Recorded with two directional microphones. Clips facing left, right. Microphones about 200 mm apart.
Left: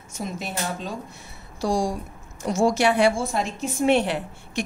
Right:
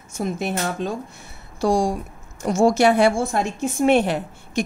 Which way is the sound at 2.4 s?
50° right (ahead or behind).